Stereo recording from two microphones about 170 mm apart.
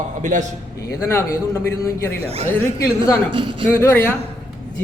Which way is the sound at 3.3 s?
30° right (ahead or behind).